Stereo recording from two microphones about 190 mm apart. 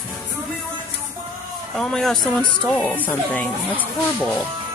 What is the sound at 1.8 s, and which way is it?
Speech, centre (ahead or behind).